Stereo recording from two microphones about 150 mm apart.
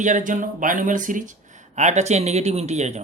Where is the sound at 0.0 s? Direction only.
60° right (ahead or behind).